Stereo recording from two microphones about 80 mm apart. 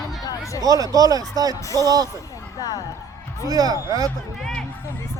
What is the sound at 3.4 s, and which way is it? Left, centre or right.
Speech, right.